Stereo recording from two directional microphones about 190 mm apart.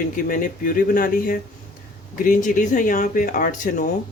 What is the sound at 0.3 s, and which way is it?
Speech, 45° left (ahead or behind).